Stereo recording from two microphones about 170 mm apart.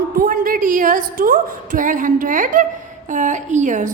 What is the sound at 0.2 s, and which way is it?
A woman's voice, 55° right (ahead or behind).